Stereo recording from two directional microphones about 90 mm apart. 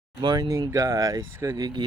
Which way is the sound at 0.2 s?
55° right (ahead or behind).